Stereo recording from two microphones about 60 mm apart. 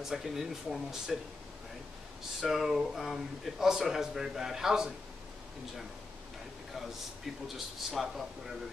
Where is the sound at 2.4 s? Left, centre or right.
Centre.